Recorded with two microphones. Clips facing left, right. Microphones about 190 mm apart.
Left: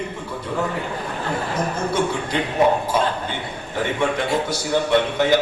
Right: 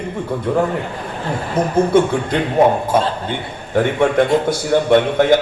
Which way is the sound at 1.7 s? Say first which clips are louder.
Right 11 dB; 55° right (ahead or behind).